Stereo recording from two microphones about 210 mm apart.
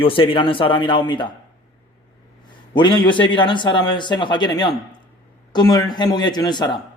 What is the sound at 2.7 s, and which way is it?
A man's voice, 20° left (ahead or behind).